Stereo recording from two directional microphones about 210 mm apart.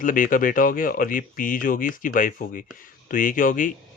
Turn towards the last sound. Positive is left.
turn(degrees=40)  # may be behind; listen again after turning